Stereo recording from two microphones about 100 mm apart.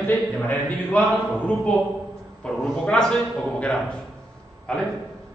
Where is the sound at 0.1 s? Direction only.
15° left (ahead or behind).